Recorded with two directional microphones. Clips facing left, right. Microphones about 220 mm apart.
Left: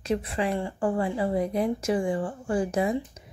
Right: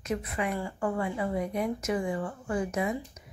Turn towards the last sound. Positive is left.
turn(degrees=30)  # may be behind; listen again after turning